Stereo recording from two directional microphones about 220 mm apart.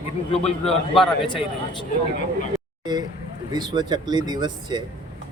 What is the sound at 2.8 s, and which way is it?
Speech, 20° right (ahead or behind).